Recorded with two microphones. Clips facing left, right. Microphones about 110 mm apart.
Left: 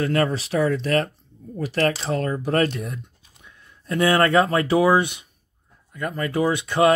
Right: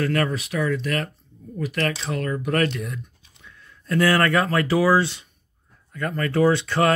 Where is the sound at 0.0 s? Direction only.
25° left (ahead or behind).